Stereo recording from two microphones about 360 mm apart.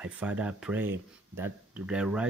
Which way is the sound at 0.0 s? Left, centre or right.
Centre.